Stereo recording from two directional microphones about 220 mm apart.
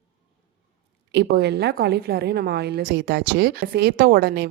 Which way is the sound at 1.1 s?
50° right (ahead or behind).